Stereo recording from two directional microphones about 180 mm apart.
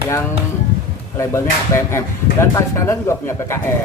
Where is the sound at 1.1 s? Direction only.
15° left (ahead or behind).